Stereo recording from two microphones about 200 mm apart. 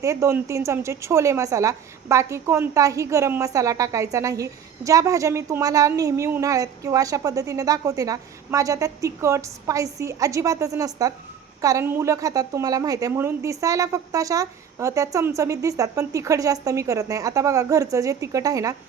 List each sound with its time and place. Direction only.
0.0 s a woman's voice: 15° right (ahead or behind)